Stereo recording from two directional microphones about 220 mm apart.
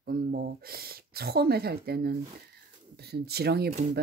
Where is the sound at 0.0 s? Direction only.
45° right (ahead or behind).